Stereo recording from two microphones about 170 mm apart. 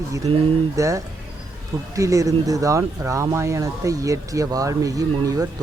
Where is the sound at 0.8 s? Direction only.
20° right (ahead or behind).